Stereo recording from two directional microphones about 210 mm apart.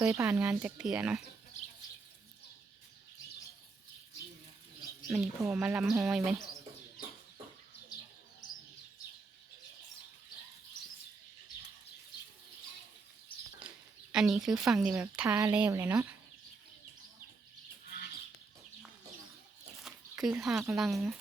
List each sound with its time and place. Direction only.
0.0 s speech: 15° right (ahead or behind)
5.1 s speech: centre (ahead or behind)
7.9 s bird: 20° left (ahead or behind)
13.6 s a sound: 5° right (ahead or behind)
14.9 s speech: 5° right (ahead or behind)
19.8 s speech: centre (ahead or behind)